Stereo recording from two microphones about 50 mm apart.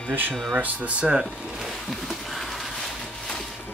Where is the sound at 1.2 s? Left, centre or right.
Centre.